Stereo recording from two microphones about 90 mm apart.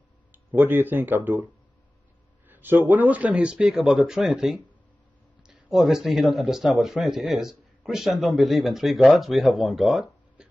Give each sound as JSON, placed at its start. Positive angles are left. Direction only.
{"t": 0.3, "sound": "speech", "side_deg": -20}
{"t": 2.4, "sound": "speech", "side_deg": -20}